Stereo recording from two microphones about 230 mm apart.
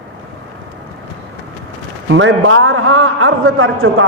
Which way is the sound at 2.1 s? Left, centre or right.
Right.